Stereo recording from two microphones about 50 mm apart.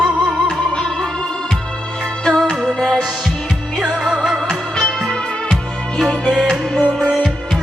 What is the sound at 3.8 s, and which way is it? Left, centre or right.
Music, centre.